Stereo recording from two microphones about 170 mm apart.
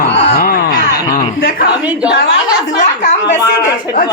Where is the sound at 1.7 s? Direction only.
10° right (ahead or behind).